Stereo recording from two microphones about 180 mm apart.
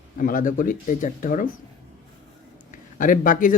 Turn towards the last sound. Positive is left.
turn(degrees=50)  # may be behind; listen again after turning